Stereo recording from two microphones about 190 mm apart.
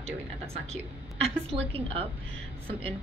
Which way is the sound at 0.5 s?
35° right (ahead or behind).